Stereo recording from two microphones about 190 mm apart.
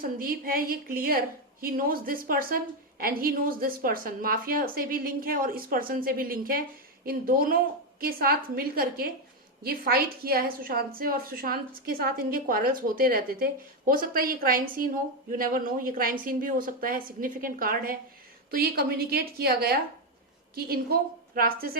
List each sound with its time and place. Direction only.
0.0 s a woman's voice: 50° right (ahead or behind)